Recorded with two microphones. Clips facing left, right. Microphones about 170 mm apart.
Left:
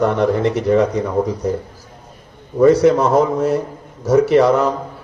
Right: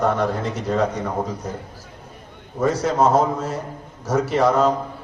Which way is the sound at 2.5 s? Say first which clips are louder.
Left 8 dB; 65° left (ahead or behind).